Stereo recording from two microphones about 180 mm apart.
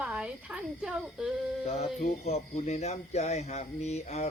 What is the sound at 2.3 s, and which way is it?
Speech, 35° left (ahead or behind).